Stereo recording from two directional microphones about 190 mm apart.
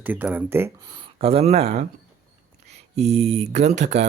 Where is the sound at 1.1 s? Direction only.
30° right (ahead or behind).